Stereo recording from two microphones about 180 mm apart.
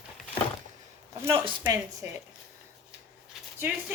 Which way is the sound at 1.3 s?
25° right (ahead or behind).